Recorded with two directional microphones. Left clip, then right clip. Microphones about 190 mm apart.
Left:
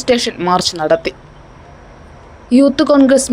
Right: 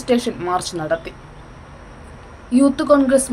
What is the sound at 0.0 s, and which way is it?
Speech, 40° left (ahead or behind).